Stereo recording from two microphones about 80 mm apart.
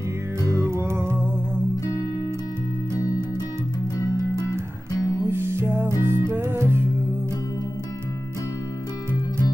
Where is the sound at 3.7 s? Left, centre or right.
Left.